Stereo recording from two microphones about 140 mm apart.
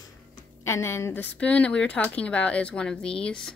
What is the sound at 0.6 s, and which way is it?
Speech, 20° left (ahead or behind).